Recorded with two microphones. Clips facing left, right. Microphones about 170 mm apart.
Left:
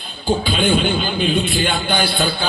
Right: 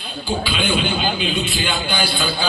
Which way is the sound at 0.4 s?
45° left (ahead or behind).